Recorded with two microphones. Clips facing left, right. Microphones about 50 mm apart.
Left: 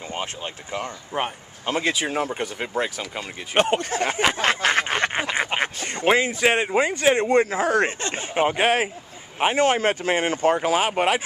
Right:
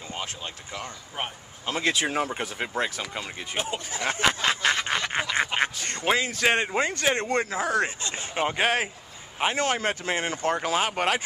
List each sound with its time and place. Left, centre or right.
0.1 s speech: left
1.1 s speech: left
1.9 s speech: centre
3.5 s speech: left
4.1 s speech: centre
4.4 s a sound: left
5.3 s speech: centre
5.9 s speech: left
6.4 s speech: centre
7.4 s speech: left
8.4 s speech: centre